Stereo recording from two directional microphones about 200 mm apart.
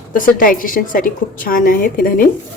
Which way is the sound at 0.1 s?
45° left (ahead or behind).